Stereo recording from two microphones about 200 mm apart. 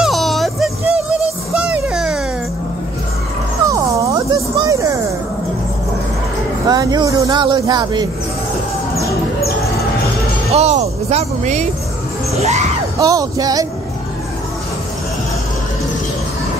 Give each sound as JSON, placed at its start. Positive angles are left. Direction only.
{"t": 0.0, "sound": "a sound", "side_deg": 0}
{"t": 1.5, "sound": "music", "side_deg": -5}
{"t": 3.7, "sound": "music", "side_deg": -15}
{"t": 6.7, "sound": "speech", "side_deg": -20}
{"t": 10.5, "sound": "speech", "side_deg": -35}
{"t": 12.4, "sound": "music", "side_deg": -35}
{"t": 13.0, "sound": "music", "side_deg": -20}